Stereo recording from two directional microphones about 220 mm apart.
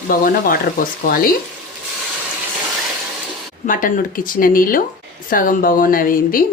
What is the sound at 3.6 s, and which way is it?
Speech, 40° left (ahead or behind).